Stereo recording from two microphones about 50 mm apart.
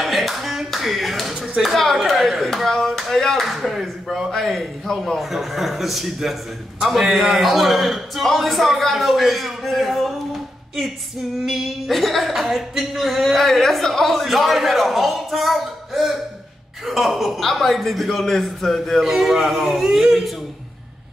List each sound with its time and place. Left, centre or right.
0.0 s clapping: centre
2.0 s chop: centre
4.3 s a man's voice: centre